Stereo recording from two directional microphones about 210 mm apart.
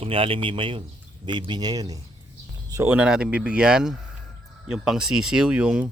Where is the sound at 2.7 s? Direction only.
15° right (ahead or behind).